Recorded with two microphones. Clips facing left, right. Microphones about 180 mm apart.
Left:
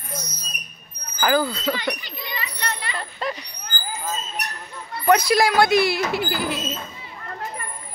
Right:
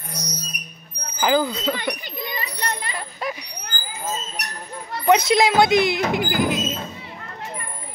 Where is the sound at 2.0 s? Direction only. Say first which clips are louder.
Right 3 dB; 50° right (ahead or behind).